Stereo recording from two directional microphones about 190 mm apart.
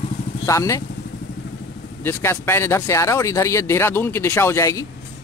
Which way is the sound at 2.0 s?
15° left (ahead or behind).